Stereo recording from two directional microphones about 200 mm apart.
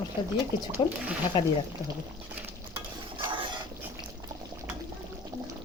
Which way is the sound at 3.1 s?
25° right (ahead or behind).